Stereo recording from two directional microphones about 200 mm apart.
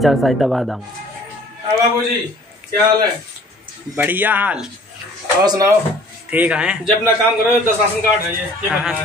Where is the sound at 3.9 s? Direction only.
10° right (ahead or behind).